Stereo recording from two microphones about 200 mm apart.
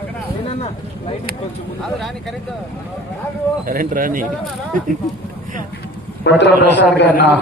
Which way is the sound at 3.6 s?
45° right (ahead or behind).